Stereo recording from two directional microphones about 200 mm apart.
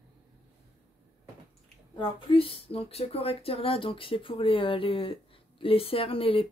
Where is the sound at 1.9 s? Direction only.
25° left (ahead or behind).